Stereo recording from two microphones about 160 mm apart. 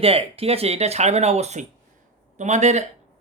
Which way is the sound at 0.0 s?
35° right (ahead or behind).